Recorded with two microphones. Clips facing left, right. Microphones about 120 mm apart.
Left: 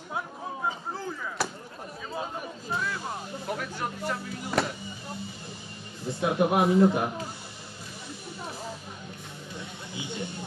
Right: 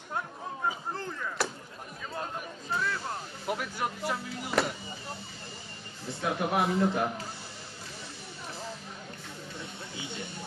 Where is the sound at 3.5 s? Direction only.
10° right (ahead or behind).